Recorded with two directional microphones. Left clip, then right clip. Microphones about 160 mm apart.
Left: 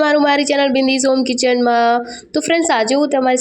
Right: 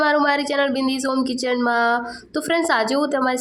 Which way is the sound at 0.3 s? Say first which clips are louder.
Left 5 dB; 25° left (ahead or behind).